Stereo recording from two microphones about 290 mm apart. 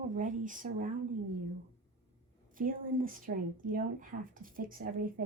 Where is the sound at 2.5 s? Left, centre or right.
Right.